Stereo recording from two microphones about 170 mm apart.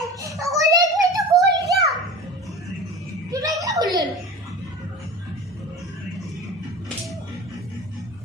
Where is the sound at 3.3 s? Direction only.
20° right (ahead or behind).